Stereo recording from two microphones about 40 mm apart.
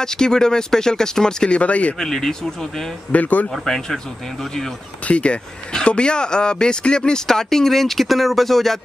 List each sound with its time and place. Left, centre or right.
0.0 s speech: centre
1.6 s speech: left
2.0 s speech: centre
3.1 s speech: left
3.6 s speech: centre
5.0 s speech: left; by 8.7 s centre